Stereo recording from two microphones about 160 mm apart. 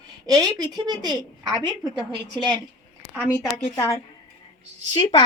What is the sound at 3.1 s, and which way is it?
Speech, 15° right (ahead or behind).